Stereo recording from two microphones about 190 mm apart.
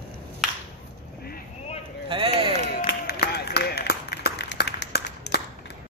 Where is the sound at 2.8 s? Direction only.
60° left (ahead or behind).